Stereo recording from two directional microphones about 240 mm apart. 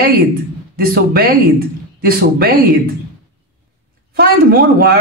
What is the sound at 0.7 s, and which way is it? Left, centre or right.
Speech, right.